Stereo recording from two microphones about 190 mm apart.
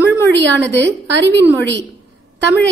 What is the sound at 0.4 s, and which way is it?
Speech, 70° right (ahead or behind).